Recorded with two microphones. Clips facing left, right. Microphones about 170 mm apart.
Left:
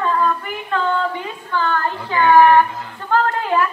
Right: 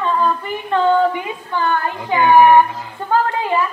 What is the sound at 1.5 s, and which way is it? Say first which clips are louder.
Speech: right 1 dB; 15° right (ahead or behind).